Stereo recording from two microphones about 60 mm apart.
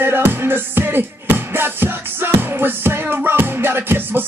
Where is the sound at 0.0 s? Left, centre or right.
Right.